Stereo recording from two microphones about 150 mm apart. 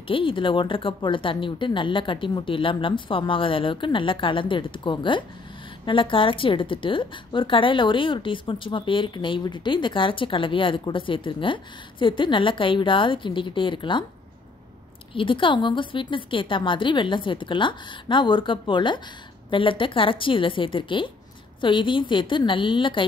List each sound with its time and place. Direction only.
0.1 s a woman's voice: 35° left (ahead or behind)
15.1 s a woman's voice: 35° left (ahead or behind)